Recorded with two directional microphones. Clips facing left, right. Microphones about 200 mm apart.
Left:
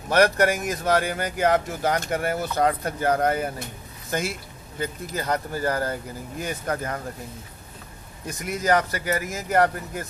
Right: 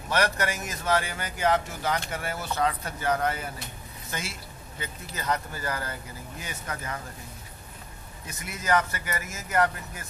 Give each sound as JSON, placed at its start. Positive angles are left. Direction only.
{"t": 0.1, "sound": "speech", "side_deg": 55}
{"t": 8.5, "sound": "speech", "side_deg": 40}